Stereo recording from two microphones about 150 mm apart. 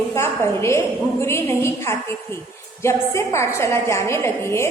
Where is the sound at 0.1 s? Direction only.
20° left (ahead or behind).